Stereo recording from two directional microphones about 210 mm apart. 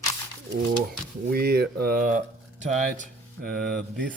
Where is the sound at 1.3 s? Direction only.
45° right (ahead or behind).